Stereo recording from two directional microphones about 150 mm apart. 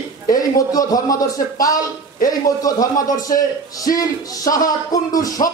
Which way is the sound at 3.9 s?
25° left (ahead or behind).